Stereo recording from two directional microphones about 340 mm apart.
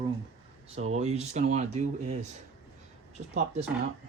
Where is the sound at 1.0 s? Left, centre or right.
Centre.